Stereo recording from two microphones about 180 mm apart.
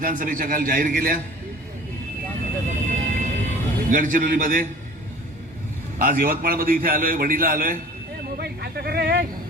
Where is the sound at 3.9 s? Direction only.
50° right (ahead or behind).